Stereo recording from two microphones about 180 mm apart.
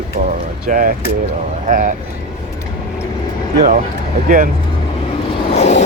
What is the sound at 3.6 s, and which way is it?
Speech, 45° right (ahead or behind).